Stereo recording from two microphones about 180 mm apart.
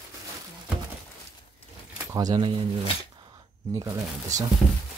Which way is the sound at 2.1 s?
20° right (ahead or behind).